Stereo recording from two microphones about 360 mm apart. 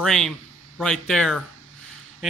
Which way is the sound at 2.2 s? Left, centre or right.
Centre.